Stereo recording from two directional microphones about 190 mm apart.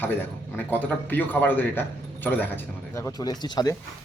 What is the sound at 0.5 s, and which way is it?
A man's voice, 10° left (ahead or behind).